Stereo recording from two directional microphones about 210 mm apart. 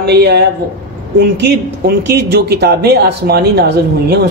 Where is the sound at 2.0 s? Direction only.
50° right (ahead or behind).